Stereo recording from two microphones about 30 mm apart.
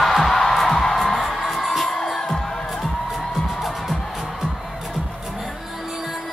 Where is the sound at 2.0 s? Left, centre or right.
Centre.